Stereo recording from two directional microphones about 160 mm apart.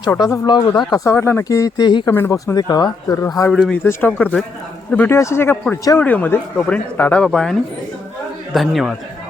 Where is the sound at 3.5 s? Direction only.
5° left (ahead or behind).